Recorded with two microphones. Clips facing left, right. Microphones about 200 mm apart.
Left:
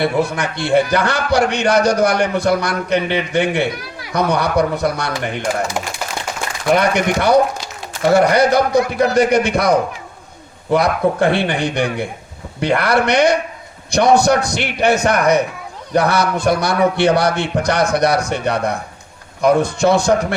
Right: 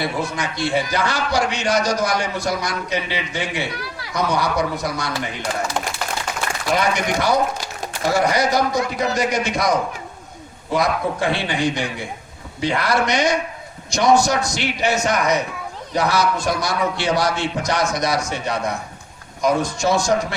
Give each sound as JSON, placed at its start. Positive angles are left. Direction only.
{"t": 0.3, "sound": "a man's voice", "side_deg": 60}
{"t": 6.7, "sound": "a man's voice", "side_deg": 60}